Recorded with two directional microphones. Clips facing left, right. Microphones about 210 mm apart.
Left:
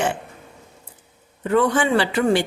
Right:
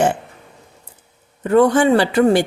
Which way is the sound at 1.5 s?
40° right (ahead or behind).